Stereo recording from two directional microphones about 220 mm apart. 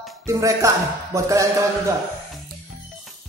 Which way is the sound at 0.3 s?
15° right (ahead or behind).